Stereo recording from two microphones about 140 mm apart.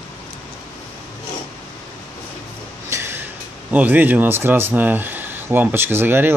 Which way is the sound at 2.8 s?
20° right (ahead or behind).